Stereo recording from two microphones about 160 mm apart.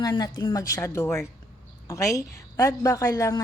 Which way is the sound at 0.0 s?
25° left (ahead or behind).